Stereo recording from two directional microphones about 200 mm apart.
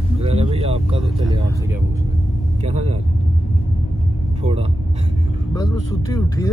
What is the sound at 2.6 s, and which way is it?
Speech, 30° right (ahead or behind).